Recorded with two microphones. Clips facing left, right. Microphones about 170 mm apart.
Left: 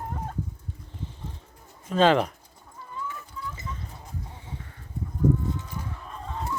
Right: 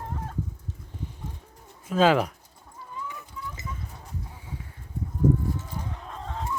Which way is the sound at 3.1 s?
15° right (ahead or behind).